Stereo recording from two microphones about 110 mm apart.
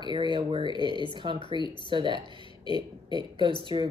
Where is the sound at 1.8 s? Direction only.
45° right (ahead or behind).